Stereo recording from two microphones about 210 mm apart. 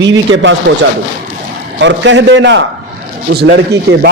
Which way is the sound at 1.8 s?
60° right (ahead or behind).